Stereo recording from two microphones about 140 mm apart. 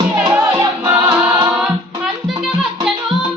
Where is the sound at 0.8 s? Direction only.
20° right (ahead or behind).